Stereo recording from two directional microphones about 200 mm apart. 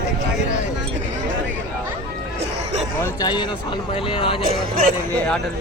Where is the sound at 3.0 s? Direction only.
20° left (ahead or behind).